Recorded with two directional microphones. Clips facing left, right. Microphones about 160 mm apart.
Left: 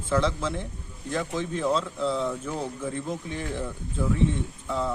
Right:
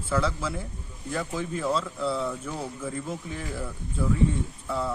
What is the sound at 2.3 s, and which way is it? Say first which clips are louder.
Speech: left 2 dB; 10° left (ahead or behind).